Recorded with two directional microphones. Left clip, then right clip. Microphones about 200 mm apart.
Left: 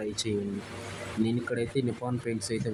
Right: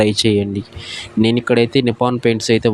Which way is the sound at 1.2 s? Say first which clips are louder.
Right 18 dB; 40° right (ahead or behind).